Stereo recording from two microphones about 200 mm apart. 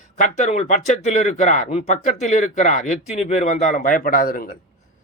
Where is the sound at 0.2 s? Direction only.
35° left (ahead or behind).